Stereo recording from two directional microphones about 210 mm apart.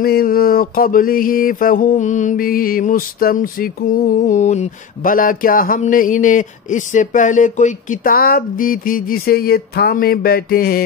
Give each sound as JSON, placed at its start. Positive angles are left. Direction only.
{"t": 0.0, "sound": "mantra", "side_deg": 45}